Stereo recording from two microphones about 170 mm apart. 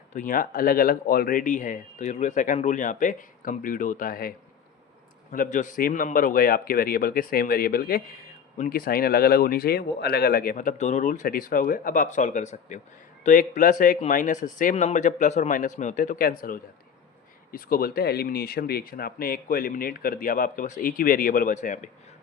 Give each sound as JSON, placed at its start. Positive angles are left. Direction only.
{"t": 0.1, "sound": "speech", "side_deg": 50}